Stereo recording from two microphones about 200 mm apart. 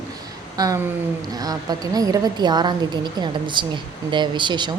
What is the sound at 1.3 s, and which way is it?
A woman's voice, 20° right (ahead or behind).